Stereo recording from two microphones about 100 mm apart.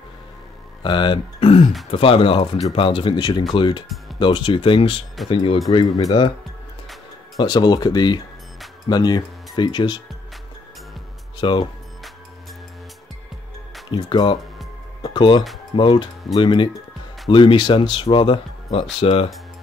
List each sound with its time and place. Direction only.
0.8 s speech: 55° left (ahead or behind)
7.3 s speech: 45° left (ahead or behind)
11.4 s speech: 55° left (ahead or behind)
13.8 s speech: 50° left (ahead or behind)
15.0 s music: 55° left (ahead or behind)
15.7 s speech: 55° left (ahead or behind); by 19.3 s 70° left (ahead or behind)